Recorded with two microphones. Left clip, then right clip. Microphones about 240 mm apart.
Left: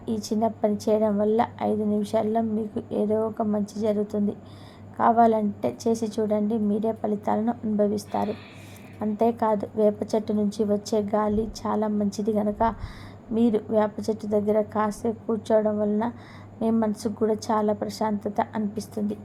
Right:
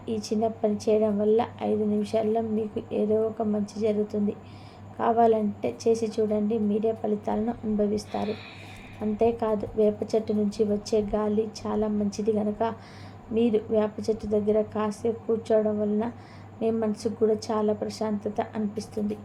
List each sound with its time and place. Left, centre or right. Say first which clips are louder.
0.0 s a woman's voice: left 1 dB; centre